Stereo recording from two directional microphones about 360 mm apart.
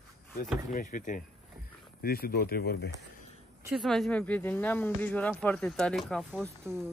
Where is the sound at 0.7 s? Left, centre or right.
Left.